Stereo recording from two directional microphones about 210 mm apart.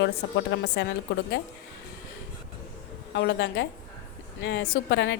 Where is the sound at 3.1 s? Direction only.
55° left (ahead or behind).